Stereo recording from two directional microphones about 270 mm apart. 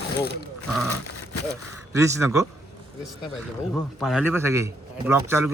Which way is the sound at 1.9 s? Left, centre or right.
Centre.